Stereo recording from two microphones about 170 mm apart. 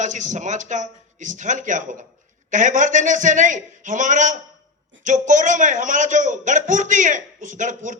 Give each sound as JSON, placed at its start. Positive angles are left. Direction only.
{"t": 0.0, "sound": "a man's voice", "side_deg": -45}